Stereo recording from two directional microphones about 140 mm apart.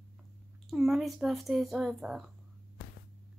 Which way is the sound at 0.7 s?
Centre (ahead or behind).